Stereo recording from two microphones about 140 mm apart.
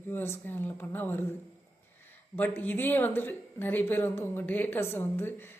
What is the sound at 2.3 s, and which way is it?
A woman's voice, 15° left (ahead or behind).